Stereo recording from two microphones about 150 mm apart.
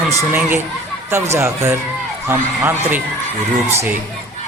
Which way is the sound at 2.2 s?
15° right (ahead or behind).